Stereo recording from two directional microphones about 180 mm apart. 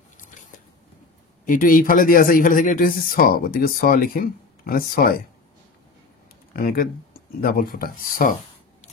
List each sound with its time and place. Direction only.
1.4 s speech: 50° left (ahead or behind)
6.5 s speech: 55° left (ahead or behind)